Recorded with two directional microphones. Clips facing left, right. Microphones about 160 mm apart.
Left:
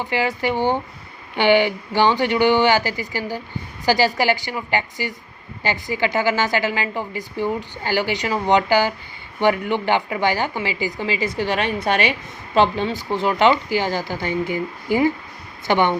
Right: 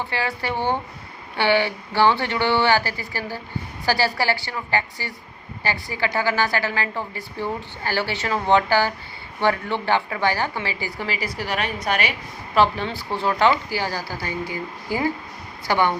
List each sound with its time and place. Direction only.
0.0 s a woman's voice: 15° left (ahead or behind)